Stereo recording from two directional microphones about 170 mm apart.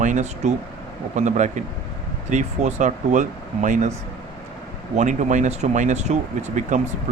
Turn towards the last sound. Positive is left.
turn(degrees=-45)  # may be behind; listen again after turning